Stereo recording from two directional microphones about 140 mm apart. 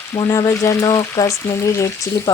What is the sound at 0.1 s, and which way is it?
Speech, 20° left (ahead or behind).